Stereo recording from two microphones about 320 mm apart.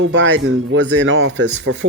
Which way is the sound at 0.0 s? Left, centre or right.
Right.